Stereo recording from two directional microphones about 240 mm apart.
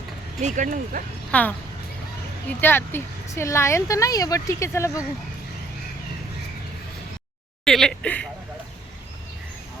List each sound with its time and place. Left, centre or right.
0.3 s speech: right
1.3 s speech: centre
2.6 s speech: centre
7.6 s speech: centre